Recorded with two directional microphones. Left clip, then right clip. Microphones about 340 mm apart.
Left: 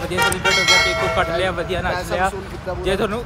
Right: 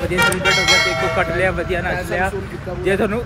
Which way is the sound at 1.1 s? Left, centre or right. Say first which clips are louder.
Right 1 dB; centre.